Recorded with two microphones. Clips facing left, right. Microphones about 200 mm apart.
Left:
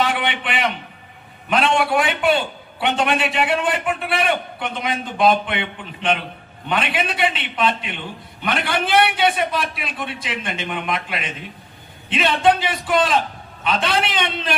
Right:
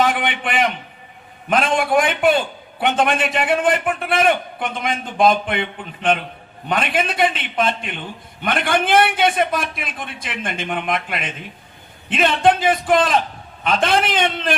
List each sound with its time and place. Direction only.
0.0 s a man's voice: 45° right (ahead or behind)